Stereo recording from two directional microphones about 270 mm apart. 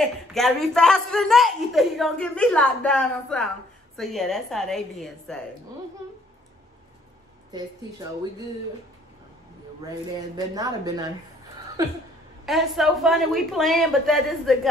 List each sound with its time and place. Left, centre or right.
0.0 s a woman's voice: centre
7.5 s a woman's voice: centre
9.8 s a woman's voice: centre
12.4 s a woman's voice: centre